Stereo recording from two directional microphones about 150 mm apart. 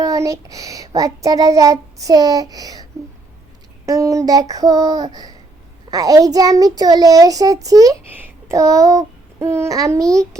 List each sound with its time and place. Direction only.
0.0 s a child's voice: 20° right (ahead or behind)
3.8 s a child's voice: 20° right (ahead or behind)